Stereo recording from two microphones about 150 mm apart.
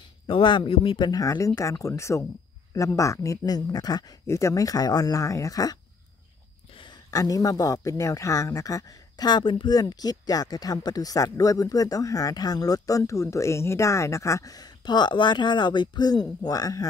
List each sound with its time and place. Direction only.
0.3 s speech: 35° left (ahead or behind)
7.1 s speech: 25° left (ahead or behind)